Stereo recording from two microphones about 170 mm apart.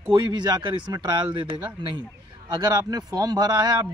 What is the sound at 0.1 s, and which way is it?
Speech, 25° right (ahead or behind).